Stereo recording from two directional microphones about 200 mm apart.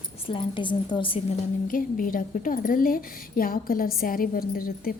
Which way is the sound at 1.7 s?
45° left (ahead or behind).